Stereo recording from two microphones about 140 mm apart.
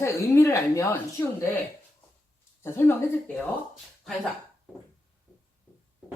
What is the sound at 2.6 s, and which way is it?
Speech, 15° left (ahead or behind).